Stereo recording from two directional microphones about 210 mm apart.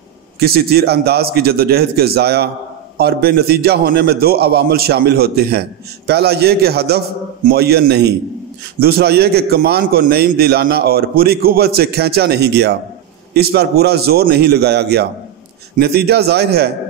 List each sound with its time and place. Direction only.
0.4 s a man's voice: 45° right (ahead or behind)